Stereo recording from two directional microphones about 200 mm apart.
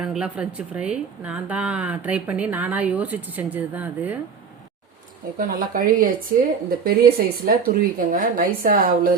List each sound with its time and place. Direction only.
0.0 s a woman's voice: 5° right (ahead or behind)
5.4 s a woman's voice: 45° right (ahead or behind)